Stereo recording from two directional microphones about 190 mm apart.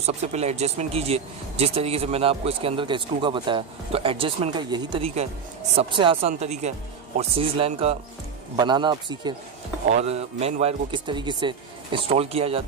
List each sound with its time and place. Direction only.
0.0 s speech: 35° right (ahead or behind)
9.8 s speech: 35° right (ahead or behind)